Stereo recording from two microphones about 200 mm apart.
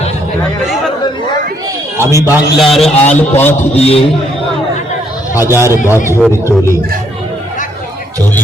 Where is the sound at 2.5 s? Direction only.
Centre (ahead or behind).